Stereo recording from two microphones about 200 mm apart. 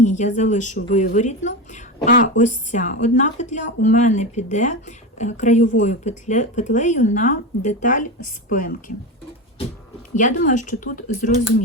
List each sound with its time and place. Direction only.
0.0 s a woman's voice: 35° left (ahead or behind)
10.2 s a woman's voice: 40° left (ahead or behind)